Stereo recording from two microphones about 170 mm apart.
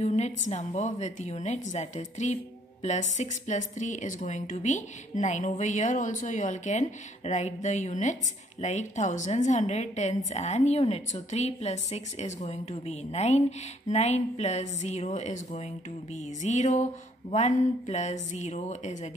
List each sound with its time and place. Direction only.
0.0 s speech: 40° left (ahead or behind)